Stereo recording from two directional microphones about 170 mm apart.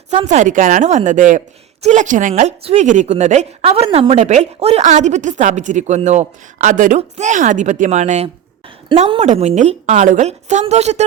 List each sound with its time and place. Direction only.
0.1 s speech: 40° right (ahead or behind)
8.9 s a woman's voice: 35° right (ahead or behind)